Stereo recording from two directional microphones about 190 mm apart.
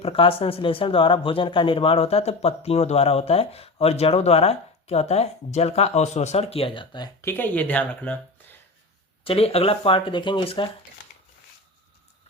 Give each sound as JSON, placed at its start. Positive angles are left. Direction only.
{"t": 0.0, "sound": "speech", "side_deg": 30}
{"t": 9.2, "sound": "speech", "side_deg": 30}